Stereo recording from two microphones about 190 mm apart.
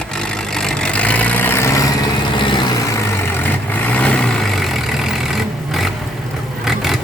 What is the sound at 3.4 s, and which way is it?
Vehicle, 10° left (ahead or behind).